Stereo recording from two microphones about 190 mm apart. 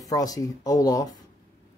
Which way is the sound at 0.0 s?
20° left (ahead or behind).